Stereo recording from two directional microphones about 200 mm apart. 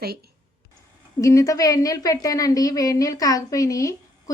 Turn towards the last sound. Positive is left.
turn(degrees=15)  # may be behind; listen again after turning